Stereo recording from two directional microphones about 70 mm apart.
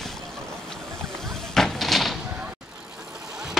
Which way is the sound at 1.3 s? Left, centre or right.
Centre.